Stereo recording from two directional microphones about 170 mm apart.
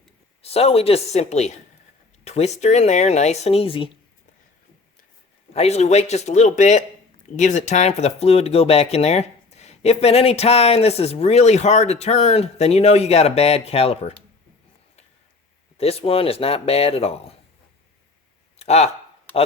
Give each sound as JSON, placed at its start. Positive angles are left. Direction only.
{"t": 0.4, "sound": "speech", "side_deg": 35}
{"t": 5.5, "sound": "speech", "side_deg": 40}
{"t": 15.8, "sound": "speech", "side_deg": 35}
{"t": 18.6, "sound": "speech", "side_deg": 40}